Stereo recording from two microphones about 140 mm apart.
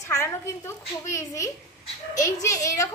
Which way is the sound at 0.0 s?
20° left (ahead or behind).